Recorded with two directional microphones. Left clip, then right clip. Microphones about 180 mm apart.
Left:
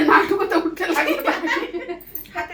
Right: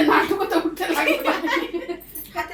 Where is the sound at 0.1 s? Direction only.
40° right (ahead or behind).